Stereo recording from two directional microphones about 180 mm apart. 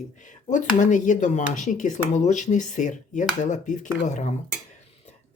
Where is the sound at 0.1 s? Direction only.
45° left (ahead or behind).